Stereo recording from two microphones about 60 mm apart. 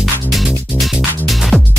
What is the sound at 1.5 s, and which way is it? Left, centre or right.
Music, left.